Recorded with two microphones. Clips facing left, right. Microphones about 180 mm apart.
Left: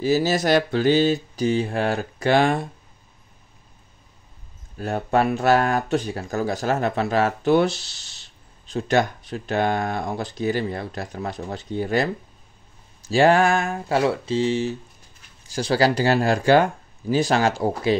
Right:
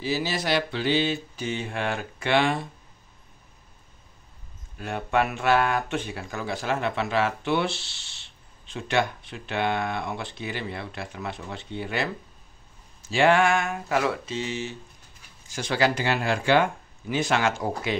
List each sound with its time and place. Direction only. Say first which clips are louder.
0.0 s mantra: left 8 dB; 45° left (ahead or behind)
4.7 s speech: left 4 dB; 40° left (ahead or behind)